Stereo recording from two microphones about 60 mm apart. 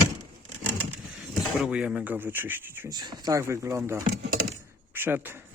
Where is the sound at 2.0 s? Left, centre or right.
Right.